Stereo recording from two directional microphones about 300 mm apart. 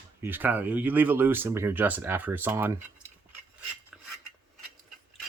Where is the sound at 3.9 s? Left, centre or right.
Centre.